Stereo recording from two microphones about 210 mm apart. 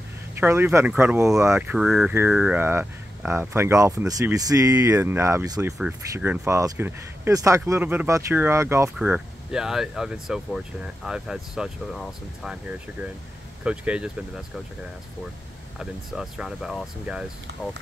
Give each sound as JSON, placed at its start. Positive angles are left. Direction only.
{"t": 0.4, "sound": "speech", "side_deg": -10}
{"t": 15.8, "sound": "speech", "side_deg": 0}